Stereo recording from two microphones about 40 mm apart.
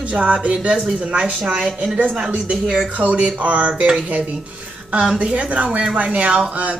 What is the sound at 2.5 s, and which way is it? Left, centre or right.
Speech, right.